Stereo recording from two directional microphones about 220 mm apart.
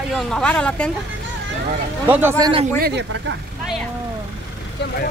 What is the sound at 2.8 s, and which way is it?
Speech, 50° right (ahead or behind).